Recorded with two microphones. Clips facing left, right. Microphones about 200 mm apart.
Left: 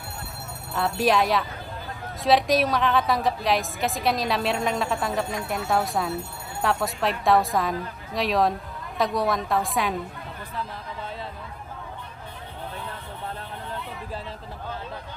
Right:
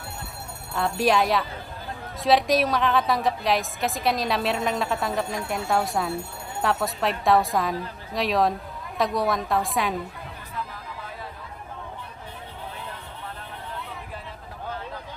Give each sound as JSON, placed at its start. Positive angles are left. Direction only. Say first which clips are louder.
{"t": 0.7, "sound": "a woman's voice", "louder": "even", "side_deg": 0}